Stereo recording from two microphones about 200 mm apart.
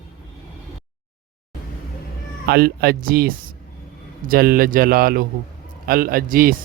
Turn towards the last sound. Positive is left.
turn(degrees=-45)  # may be behind; listen again after turning